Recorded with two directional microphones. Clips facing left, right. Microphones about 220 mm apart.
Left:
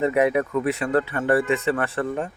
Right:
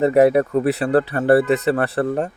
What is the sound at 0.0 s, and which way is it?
Speech, 35° right (ahead or behind).